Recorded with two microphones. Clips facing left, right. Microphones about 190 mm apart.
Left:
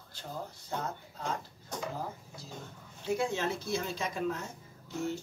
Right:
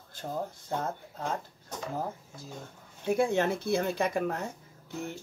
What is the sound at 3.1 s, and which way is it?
Speech, 55° right (ahead or behind).